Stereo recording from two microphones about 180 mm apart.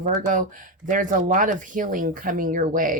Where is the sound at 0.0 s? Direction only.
45° right (ahead or behind).